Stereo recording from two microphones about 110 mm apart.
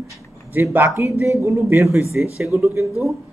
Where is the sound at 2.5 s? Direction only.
25° right (ahead or behind).